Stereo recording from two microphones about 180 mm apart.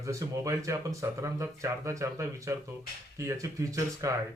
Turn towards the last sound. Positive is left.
turn(degrees=-20)  # may be behind; listen again after turning